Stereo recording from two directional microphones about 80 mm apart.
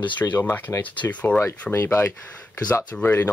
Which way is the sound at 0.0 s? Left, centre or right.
Left.